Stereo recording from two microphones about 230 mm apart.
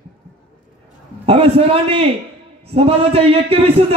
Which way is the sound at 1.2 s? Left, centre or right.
Right.